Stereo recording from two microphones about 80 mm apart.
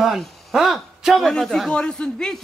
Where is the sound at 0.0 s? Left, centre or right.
Centre.